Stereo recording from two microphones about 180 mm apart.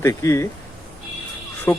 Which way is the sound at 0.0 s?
15° left (ahead or behind).